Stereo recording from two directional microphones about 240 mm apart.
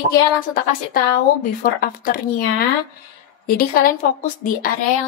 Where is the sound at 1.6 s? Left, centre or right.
Left.